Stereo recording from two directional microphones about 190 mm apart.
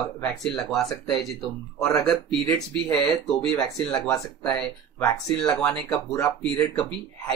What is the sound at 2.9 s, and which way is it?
Speech, 5° left (ahead or behind).